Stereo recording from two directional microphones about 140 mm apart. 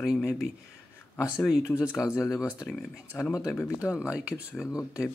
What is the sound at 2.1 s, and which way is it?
Speech, 25° left (ahead or behind).